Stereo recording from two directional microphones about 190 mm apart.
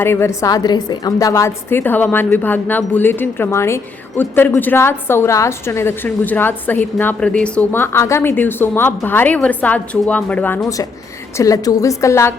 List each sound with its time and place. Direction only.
0.0 s a woman's voice: 10° left (ahead or behind)